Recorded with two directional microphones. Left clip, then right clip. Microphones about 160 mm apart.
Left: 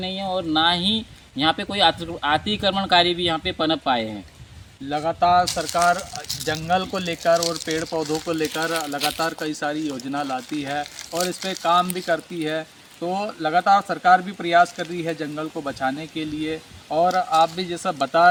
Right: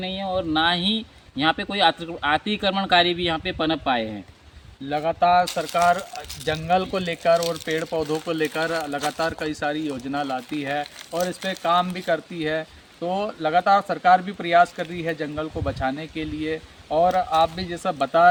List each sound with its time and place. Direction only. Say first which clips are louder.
0.0 s speech: even; centre (ahead or behind)
4.9 s speech: even; 10° right (ahead or behind)